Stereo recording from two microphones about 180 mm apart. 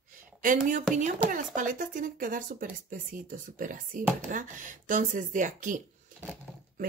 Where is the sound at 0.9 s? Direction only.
45° right (ahead or behind).